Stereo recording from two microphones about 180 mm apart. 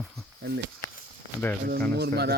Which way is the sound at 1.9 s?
65° right (ahead or behind).